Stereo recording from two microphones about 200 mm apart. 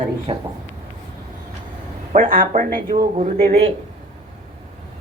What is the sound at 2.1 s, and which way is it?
Speech, 45° right (ahead or behind).